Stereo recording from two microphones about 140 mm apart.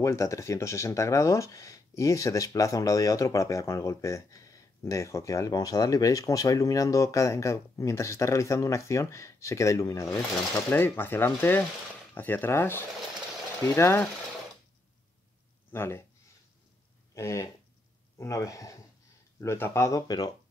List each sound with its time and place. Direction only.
0.0 s speech: 20° left (ahead or behind)
15.7 s speech: 15° left (ahead or behind)
17.1 s a sound: 20° left (ahead or behind)
18.1 s speech: 25° left (ahead or behind)